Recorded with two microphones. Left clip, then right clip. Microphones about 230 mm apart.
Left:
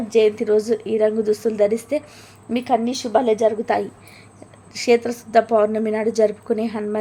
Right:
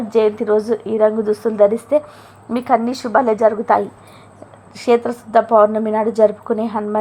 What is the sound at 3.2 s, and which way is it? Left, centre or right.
Speech, right.